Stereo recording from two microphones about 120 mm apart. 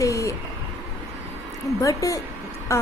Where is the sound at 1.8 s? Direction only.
30° left (ahead or behind).